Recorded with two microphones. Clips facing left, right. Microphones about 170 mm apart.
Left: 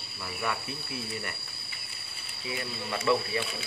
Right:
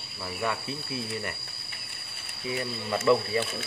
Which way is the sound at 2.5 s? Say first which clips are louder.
Right 4 dB; 40° right (ahead or behind).